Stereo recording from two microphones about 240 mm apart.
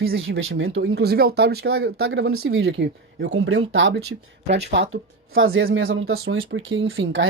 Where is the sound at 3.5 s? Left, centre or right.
Right.